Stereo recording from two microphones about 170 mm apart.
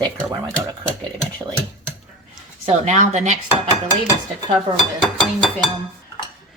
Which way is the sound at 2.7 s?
45° right (ahead or behind).